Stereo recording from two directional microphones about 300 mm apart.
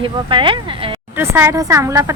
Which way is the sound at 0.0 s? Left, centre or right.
Centre.